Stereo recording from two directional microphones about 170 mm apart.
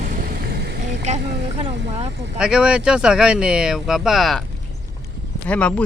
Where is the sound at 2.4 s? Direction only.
5° right (ahead or behind).